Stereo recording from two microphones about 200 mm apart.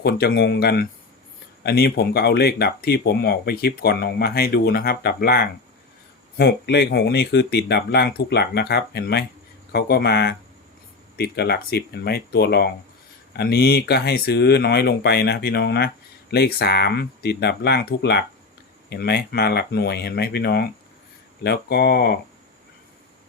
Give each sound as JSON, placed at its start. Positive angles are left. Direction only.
{"t": 0.0, "sound": "speech", "side_deg": 55}